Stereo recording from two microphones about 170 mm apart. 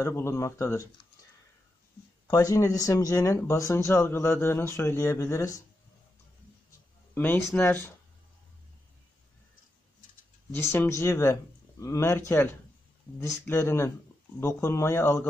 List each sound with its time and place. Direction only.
0.0 s speech: 15° left (ahead or behind)
2.2 s speech: 20° left (ahead or behind)
7.2 s speech: 10° left (ahead or behind)
10.7 s speech: 15° left (ahead or behind)
13.5 s speech: 15° left (ahead or behind)